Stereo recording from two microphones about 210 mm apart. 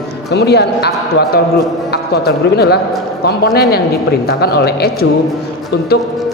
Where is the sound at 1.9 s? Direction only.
50° left (ahead or behind).